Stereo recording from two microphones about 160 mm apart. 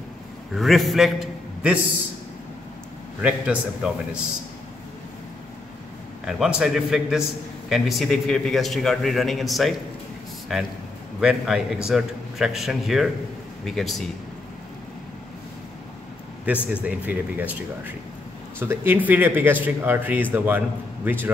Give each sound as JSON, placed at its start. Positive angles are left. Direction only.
{"t": 0.6, "sound": "a man's voice", "side_deg": 0}
{"t": 3.2, "sound": "a man's voice", "side_deg": -5}
{"t": 6.2, "sound": "a man's voice", "side_deg": -5}
{"t": 16.5, "sound": "a man's voice", "side_deg": -10}